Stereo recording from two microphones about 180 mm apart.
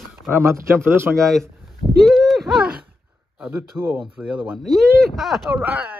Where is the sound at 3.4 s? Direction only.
10° right (ahead or behind).